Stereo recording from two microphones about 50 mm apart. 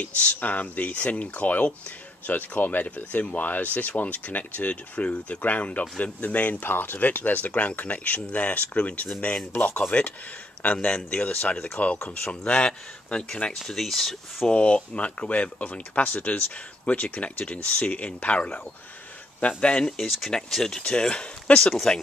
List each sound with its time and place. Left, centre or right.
0.0 s speech: left
13.6 s speech: centre
14.5 s speech: left
20.1 s speech: centre